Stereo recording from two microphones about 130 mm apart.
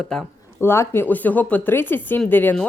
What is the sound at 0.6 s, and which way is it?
Speech, 20° left (ahead or behind).